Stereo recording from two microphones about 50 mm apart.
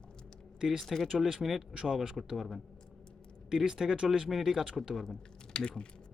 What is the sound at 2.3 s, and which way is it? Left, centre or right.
Speech, centre.